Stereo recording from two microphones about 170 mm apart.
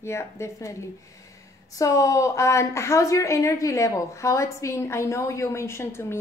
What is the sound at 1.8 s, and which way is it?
A woman's voice, 20° left (ahead or behind).